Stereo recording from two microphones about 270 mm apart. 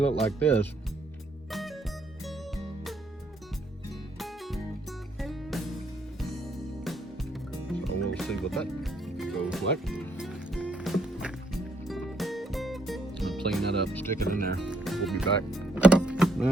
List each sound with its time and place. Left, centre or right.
0.3 s speech: centre
1.5 s music: centre
4.2 s music: centre
6.8 s music: centre
14.3 s speech: right
14.6 s power windows: centre